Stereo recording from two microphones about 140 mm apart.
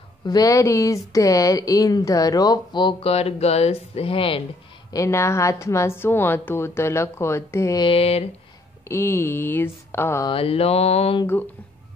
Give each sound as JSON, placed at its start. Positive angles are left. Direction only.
{"t": 0.2, "sound": "speech", "side_deg": 25}
{"t": 4.9, "sound": "speech", "side_deg": 20}
{"t": 7.8, "sound": "mantra", "side_deg": 45}
{"t": 8.8, "sound": "speech", "side_deg": 15}
{"t": 10.2, "sound": "mantra", "side_deg": 40}